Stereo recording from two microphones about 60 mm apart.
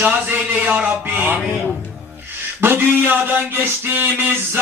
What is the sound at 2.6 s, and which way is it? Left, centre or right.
A man's voice, right.